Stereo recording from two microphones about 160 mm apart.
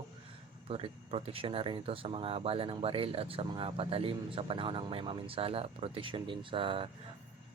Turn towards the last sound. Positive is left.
turn(degrees=-30)  # may be behind; listen again after turning